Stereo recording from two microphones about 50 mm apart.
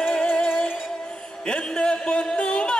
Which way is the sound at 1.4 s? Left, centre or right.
Centre.